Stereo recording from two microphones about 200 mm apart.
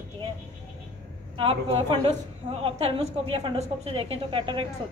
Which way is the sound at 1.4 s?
30° right (ahead or behind).